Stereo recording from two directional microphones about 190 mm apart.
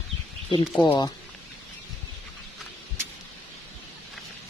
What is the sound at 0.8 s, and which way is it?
Speech, 25° left (ahead or behind).